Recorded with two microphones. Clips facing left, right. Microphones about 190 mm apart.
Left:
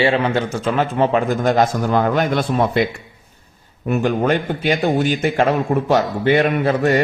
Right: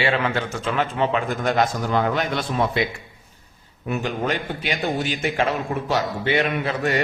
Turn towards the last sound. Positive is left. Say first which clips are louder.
# left 7 dB
turn(degrees=45)  # may be behind; listen again after turning